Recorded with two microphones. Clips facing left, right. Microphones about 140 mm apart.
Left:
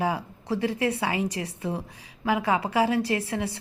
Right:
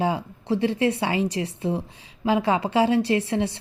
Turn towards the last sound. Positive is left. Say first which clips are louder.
# right 5 dB
turn(degrees=-25)  # may be behind; listen again after turning